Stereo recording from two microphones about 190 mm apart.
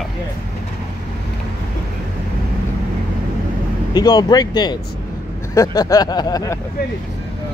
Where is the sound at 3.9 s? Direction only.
20° left (ahead or behind).